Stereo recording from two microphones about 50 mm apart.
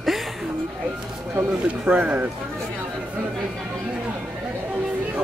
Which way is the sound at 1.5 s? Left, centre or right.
Right.